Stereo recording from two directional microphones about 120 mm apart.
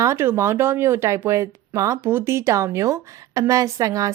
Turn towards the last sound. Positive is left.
turn(degrees=-30)  # may be behind; listen again after turning